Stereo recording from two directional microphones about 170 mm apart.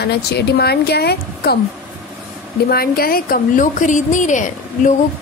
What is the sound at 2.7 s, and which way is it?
A woman's voice, 60° left (ahead or behind).